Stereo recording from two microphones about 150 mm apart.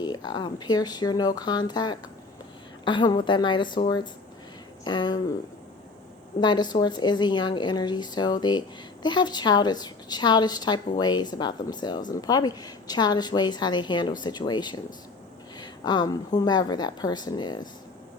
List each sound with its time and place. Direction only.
0.0 s a woman's voice: 30° left (ahead or behind)
6.4 s a woman's voice: 30° left (ahead or behind)